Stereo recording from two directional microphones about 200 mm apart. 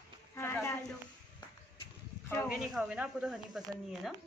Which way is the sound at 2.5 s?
5° right (ahead or behind).